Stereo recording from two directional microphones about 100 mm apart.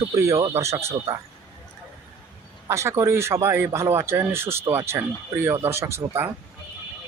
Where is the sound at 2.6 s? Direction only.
30° right (ahead or behind).